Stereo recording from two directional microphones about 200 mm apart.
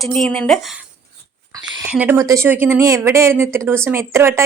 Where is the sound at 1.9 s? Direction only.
10° right (ahead or behind).